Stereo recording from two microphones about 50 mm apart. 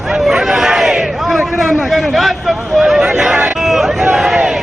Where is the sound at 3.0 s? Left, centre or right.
Centre.